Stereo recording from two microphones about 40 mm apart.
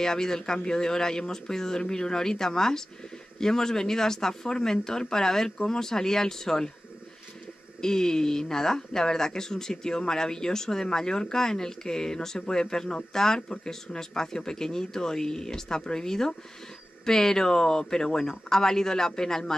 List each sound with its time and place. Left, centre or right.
0.0 s speech: centre
7.8 s speech: centre